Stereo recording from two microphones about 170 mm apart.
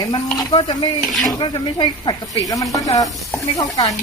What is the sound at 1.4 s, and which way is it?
Speech, 30° left (ahead or behind).